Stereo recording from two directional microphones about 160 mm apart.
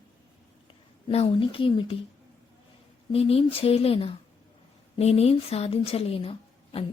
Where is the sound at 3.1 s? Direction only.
40° left (ahead or behind).